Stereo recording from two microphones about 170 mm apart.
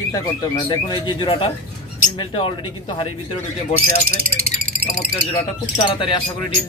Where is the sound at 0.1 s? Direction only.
25° left (ahead or behind).